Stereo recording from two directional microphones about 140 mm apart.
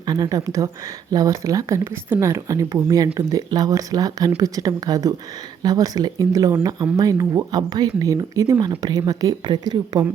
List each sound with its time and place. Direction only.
0.0 s speech: 30° right (ahead or behind)